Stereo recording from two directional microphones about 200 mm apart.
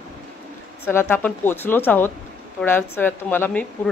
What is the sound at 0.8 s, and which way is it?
Speech, 10° left (ahead or behind).